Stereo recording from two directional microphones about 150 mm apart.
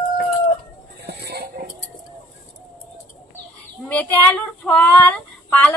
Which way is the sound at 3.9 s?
10° left (ahead or behind).